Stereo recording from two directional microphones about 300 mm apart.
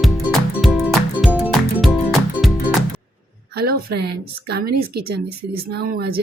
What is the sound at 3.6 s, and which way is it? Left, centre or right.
Speech, right.